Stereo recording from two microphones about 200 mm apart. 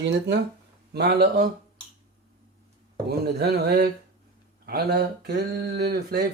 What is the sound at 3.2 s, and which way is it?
Speech, 55° right (ahead or behind).